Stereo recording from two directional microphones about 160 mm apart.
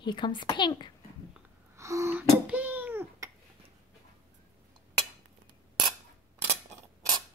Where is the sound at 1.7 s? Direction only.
20° right (ahead or behind).